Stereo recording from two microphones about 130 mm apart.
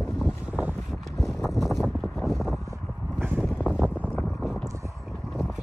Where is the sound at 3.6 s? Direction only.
5° right (ahead or behind).